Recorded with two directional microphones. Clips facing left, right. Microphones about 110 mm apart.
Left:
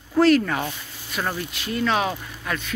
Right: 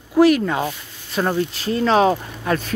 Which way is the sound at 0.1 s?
15° right (ahead or behind).